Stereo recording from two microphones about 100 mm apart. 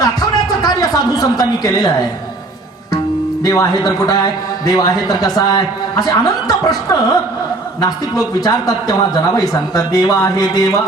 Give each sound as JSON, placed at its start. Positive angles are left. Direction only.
{"t": 0.0, "sound": "a sound", "side_deg": 40}
{"t": 3.4, "sound": "a man's voice", "side_deg": 40}
{"t": 8.4, "sound": "a man's voice", "side_deg": 40}